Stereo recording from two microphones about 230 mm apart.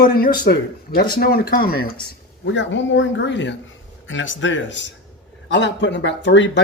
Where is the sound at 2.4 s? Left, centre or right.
Left.